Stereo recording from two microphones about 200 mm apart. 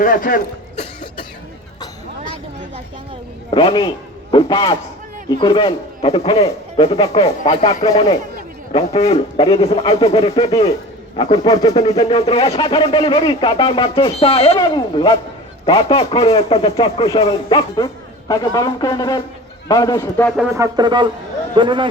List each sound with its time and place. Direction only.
0.0 s speech: 45° left (ahead or behind)
3.5 s a man's voice: 25° left (ahead or behind)
11.2 s speech: 20° left (ahead or behind)
12.0 s speech: 30° left (ahead or behind); by 20.3 s 10° left (ahead or behind)
20.5 s music: 20° right (ahead or behind)